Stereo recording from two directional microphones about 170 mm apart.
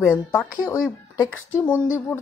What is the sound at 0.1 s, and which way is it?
Speech, 15° left (ahead or behind).